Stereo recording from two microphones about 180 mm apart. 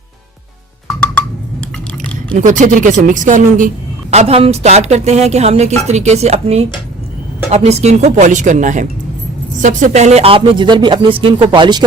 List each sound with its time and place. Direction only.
0.9 s wood block: 5° left (ahead or behind)
2.4 s a woman's voice: 45° right (ahead or behind); by 11.8 s 25° right (ahead or behind)